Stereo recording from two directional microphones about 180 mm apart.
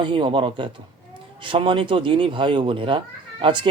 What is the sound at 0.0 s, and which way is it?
Speech, 25° right (ahead or behind).